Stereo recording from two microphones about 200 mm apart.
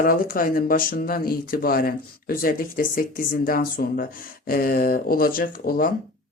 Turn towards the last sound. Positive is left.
turn(degrees=45)  # may be behind; listen again after turning